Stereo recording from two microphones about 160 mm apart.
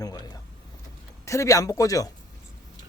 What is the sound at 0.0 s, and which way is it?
Speech, 25° left (ahead or behind).